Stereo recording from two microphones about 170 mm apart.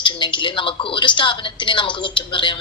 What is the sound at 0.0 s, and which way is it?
A woman's voice, 30° left (ahead or behind).